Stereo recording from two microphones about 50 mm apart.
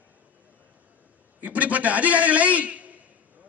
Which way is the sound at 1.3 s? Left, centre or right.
Right.